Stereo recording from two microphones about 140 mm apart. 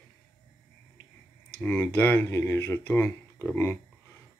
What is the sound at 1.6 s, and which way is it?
Speech, 15° left (ahead or behind).